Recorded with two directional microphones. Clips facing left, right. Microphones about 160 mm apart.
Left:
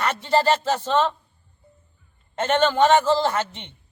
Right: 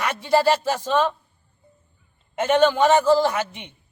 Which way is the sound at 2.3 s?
10° right (ahead or behind).